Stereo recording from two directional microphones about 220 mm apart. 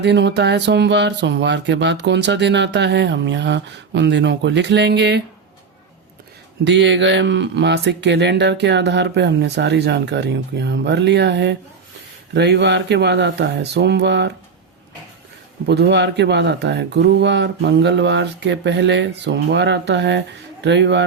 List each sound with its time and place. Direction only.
0.0 s speech: 50° right (ahead or behind)
6.7 s speech: 55° right (ahead or behind)
15.6 s speech: 50° right (ahead or behind)